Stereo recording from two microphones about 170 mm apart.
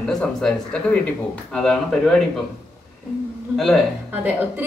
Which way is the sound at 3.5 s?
Centre (ahead or behind).